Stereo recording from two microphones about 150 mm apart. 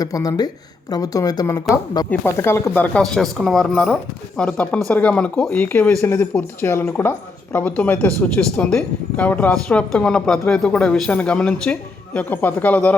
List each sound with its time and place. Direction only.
0.0 s speech: 25° left (ahead or behind)
2.0 s speech: 15° left (ahead or behind)